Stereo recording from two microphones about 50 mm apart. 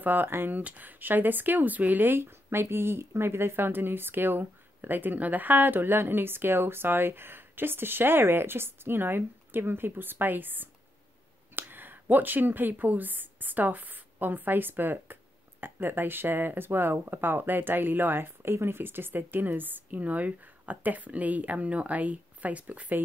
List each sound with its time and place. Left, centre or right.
0.0 s speech: right
0.6 s speech: right